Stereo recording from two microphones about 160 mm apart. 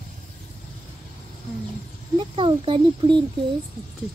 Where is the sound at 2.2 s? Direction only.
30° right (ahead or behind).